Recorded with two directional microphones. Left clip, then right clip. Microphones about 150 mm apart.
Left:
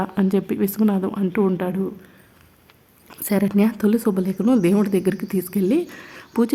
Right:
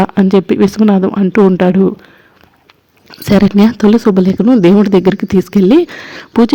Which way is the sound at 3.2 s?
35° right (ahead or behind).